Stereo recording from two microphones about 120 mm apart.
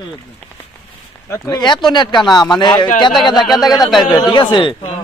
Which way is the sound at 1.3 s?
35° left (ahead or behind).